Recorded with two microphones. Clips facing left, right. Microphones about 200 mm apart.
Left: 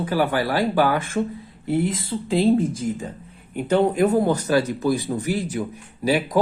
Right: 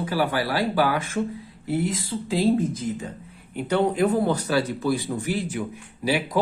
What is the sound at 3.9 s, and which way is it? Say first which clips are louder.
Speech: left 3 dB; 45° left (ahead or behind).